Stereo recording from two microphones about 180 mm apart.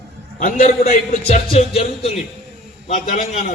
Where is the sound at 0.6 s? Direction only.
35° left (ahead or behind).